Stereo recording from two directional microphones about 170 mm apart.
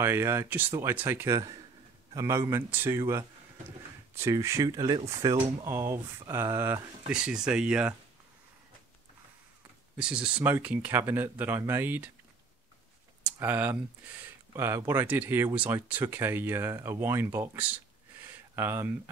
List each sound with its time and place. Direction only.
0.0 s speech: 15° right (ahead or behind)
7.1 s speech: 5° right (ahead or behind)
9.9 s speech: 5° right (ahead or behind)
13.2 s speech: 10° right (ahead or behind)
18.2 s a sound: 15° right (ahead or behind)